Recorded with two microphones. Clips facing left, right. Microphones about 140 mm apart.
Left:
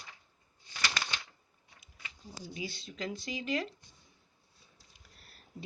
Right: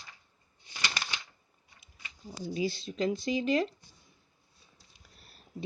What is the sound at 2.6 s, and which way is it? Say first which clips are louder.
Speech: right 9 dB; 25° right (ahead or behind).